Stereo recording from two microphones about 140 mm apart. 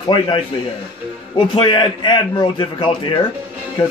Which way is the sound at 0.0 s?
35° left (ahead or behind).